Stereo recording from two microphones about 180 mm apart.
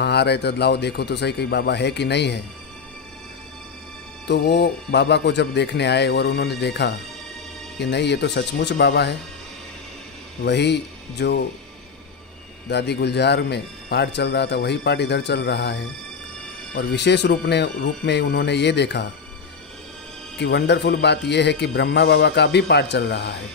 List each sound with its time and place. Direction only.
0.0 s speech: 65° left (ahead or behind)
4.3 s speech: 70° left (ahead or behind)
10.4 s speech: 70° left (ahead or behind)
12.6 s speech: 70° left (ahead or behind)
20.3 s speech: 70° left (ahead or behind)